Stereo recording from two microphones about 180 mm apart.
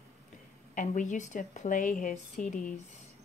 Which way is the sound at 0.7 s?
45° left (ahead or behind).